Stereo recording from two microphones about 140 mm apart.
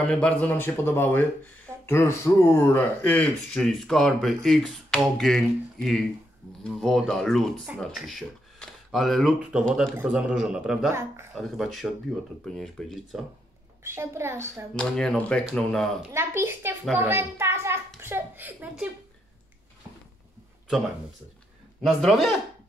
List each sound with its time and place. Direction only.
0.0 s speech: 10° left (ahead or behind)
9.9 s speech: 5° right (ahead or behind)
10.9 s a child's voice: 15° right (ahead or behind)
11.3 s speech: centre (ahead or behind)
13.8 s a woman's voice: 20° right (ahead or behind)
14.8 s speech: 5° left (ahead or behind)
16.1 s a woman's voice: 20° right (ahead or behind)
21.8 s speech: centre (ahead or behind)